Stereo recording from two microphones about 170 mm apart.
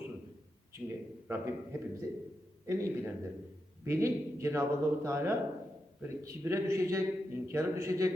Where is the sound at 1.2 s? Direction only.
15° right (ahead or behind).